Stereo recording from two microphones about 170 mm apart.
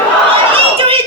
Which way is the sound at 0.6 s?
35° right (ahead or behind).